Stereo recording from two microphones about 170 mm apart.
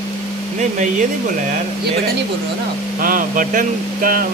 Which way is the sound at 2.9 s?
55° right (ahead or behind).